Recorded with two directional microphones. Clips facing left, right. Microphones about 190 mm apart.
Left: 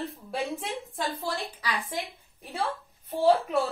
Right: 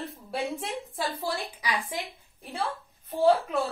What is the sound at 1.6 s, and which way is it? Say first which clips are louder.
Speech: right 2 dB; 15° right (ahead or behind).